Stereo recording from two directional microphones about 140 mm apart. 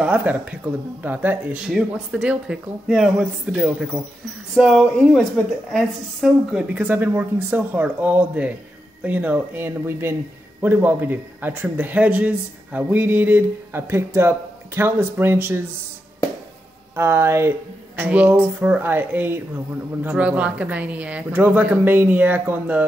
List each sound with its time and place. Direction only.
0.0 s speech: 10° right (ahead or behind)
16.9 s speech: 15° right (ahead or behind)